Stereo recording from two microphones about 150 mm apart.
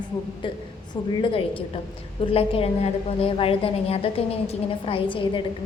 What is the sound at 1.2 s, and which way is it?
A woman's voice, 35° left (ahead or behind).